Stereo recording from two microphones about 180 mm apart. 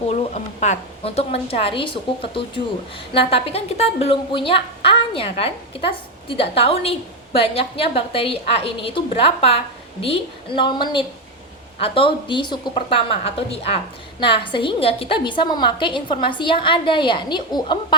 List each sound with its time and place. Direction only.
0.1 s a woman's voice: 40° left (ahead or behind)
3.2 s a woman's voice: 35° left (ahead or behind)